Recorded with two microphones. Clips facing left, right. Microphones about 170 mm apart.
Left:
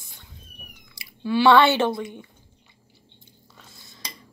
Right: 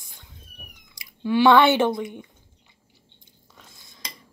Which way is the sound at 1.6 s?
20° right (ahead or behind).